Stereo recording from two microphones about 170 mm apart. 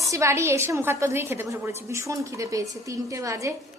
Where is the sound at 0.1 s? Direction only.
15° right (ahead or behind).